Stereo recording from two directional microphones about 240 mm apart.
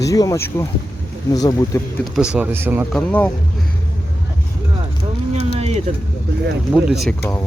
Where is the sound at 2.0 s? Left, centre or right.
Centre.